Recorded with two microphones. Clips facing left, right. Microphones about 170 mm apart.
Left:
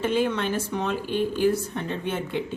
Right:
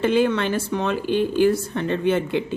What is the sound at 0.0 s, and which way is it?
A woman's voice, 85° right.